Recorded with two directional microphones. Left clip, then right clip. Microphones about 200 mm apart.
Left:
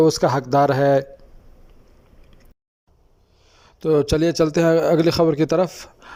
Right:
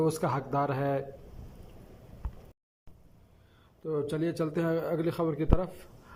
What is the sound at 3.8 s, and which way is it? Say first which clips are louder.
A man's voice: left 14 dB; 45° left (ahead or behind).